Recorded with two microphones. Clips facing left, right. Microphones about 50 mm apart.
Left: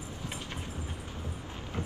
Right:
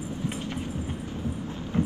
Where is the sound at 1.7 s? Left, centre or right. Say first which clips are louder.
Right 12 dB; right.